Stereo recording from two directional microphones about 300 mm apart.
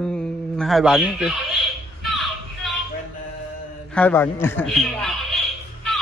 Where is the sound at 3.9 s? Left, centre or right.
Centre.